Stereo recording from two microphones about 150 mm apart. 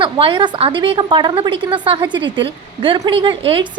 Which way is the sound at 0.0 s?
35° right (ahead or behind).